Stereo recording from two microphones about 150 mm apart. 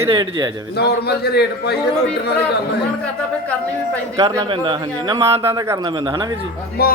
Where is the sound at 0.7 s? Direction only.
90° left.